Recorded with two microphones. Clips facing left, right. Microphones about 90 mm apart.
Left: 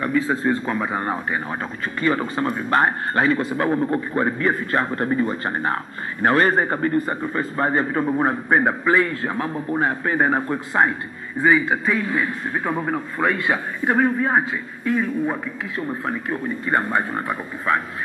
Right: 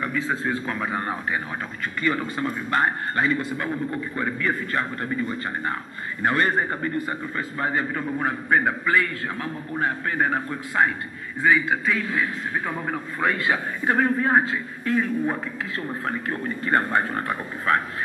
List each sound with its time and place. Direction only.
0.0 s a man's voice: 5° left (ahead or behind)
2.0 s a man's voice: 35° left (ahead or behind)
11.3 s a man's voice: 15° left (ahead or behind)
13.9 s a man's voice: 10° left (ahead or behind)